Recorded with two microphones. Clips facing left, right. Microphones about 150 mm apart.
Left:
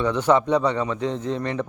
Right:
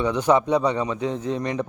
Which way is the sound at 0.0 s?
15° right (ahead or behind).